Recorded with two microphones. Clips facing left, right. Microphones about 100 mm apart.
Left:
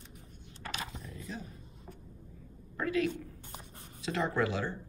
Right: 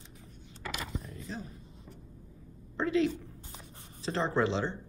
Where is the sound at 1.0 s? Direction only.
35° right (ahead or behind).